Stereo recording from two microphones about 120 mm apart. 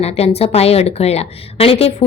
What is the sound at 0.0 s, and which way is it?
A woman's voice, 60° left (ahead or behind).